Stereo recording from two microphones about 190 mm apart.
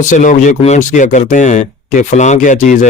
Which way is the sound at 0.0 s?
40° left (ahead or behind).